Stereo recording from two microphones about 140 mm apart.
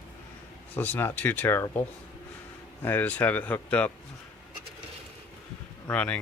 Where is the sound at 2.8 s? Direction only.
15° left (ahead or behind).